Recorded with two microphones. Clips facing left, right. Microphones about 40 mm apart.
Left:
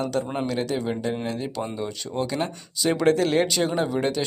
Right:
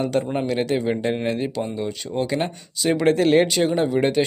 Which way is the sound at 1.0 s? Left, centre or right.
Right.